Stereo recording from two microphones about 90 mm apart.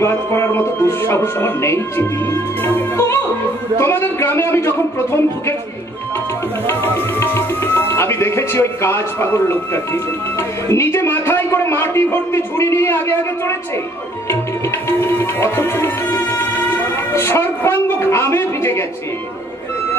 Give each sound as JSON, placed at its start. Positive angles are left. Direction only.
{"t": 0.0, "sound": "a man's voice", "side_deg": 30}
{"t": 6.7, "sound": "tabla", "side_deg": 30}
{"t": 10.7, "sound": "a man's voice", "side_deg": 30}
{"t": 14.9, "sound": "music", "side_deg": 25}